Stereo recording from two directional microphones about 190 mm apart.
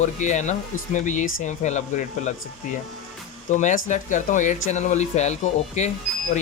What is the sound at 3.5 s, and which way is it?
Speech, 40° left (ahead or behind).